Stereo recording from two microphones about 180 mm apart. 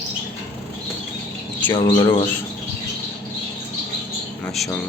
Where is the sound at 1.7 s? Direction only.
20° left (ahead or behind).